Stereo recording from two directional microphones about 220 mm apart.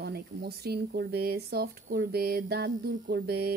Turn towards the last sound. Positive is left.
turn(degrees=-45)  # may be behind; listen again after turning